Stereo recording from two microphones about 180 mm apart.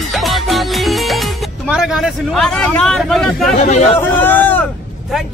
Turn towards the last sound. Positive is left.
turn(degrees=10)  # may be behind; listen again after turning